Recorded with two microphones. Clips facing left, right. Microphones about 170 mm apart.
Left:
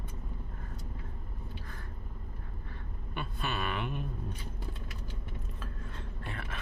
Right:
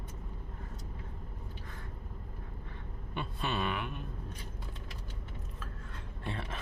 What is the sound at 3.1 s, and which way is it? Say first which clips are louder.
Speech: right 1 dB; 25° right (ahead or behind).